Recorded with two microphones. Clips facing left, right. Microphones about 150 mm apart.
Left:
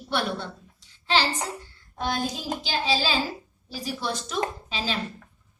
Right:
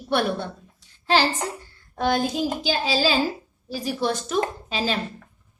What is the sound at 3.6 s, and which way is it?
A woman's voice, 50° right (ahead or behind).